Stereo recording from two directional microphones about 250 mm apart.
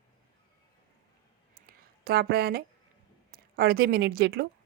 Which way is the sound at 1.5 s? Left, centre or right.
Right.